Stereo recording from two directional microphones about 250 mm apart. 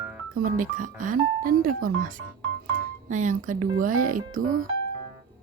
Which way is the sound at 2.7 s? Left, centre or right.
Right.